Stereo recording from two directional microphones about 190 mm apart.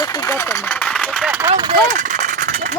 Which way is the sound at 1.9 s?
45° right (ahead or behind).